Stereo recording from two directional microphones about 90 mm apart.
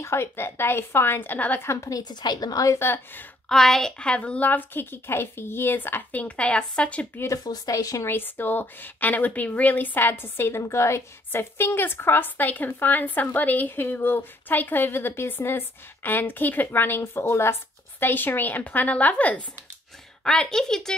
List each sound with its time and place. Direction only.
0.0 s a woman's voice: 30° left (ahead or behind)
1.7 s a woman's voice: 35° left (ahead or behind)
3.4 s a woman's voice: 5° left (ahead or behind)
7.4 s a woman's voice: 40° left (ahead or behind)
8.1 s a woman's voice: 20° left (ahead or behind); by 20.9 s 5° left (ahead or behind)